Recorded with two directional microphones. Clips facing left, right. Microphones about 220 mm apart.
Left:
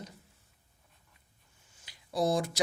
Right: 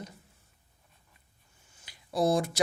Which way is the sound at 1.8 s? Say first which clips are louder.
Right 3 dB; 55° right (ahead or behind).